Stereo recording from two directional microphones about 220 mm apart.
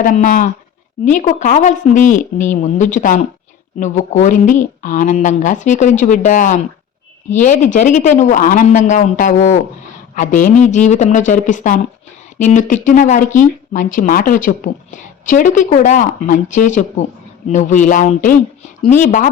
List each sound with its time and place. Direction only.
0.0 s speech: 35° left (ahead or behind)